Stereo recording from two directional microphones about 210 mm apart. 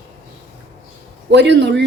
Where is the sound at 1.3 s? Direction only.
55° right (ahead or behind).